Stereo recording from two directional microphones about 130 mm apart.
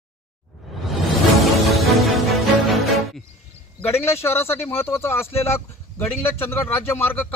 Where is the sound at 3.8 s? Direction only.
20° left (ahead or behind).